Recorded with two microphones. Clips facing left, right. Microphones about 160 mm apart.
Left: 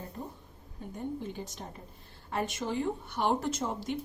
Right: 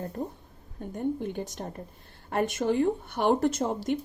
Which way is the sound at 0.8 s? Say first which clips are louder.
Right 7 dB; 55° right (ahead or behind).